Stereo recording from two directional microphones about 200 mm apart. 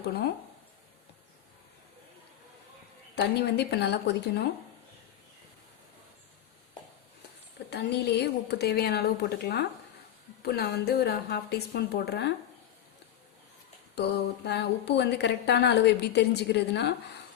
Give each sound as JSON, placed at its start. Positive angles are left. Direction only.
{"t": 3.2, "sound": "a woman's voice", "side_deg": 55}
{"t": 7.7, "sound": "a woman's voice", "side_deg": 55}
{"t": 14.4, "sound": "a woman's voice", "side_deg": 55}